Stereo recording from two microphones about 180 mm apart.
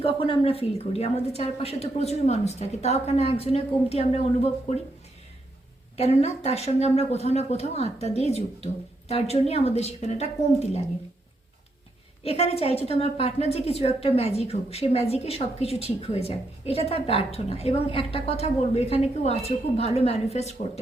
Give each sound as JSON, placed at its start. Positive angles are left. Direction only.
{"t": 0.0, "sound": "a woman's voice", "side_deg": 30}
{"t": 6.0, "sound": "a woman's voice", "side_deg": 35}
{"t": 12.2, "sound": "a woman's voice", "side_deg": 35}